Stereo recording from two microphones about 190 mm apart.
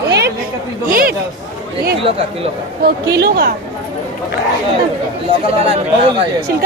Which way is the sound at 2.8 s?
55° right (ahead or behind).